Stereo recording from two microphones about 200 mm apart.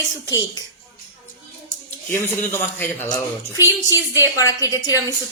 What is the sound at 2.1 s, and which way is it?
Speech, 10° left (ahead or behind).